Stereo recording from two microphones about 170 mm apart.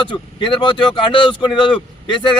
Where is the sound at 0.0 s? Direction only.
30° left (ahead or behind).